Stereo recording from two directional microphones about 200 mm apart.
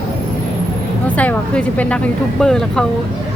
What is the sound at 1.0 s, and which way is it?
Speech, 5° left (ahead or behind).